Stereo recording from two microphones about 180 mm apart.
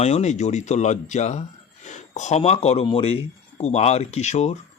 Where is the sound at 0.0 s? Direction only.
40° left (ahead or behind).